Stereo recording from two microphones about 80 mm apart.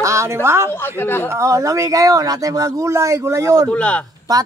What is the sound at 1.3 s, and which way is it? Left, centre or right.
Speech, right.